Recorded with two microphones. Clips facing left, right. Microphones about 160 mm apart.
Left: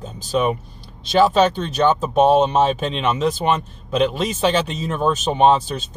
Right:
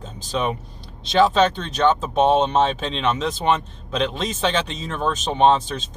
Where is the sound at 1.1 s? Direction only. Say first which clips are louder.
Left 2 dB; 10° left (ahead or behind).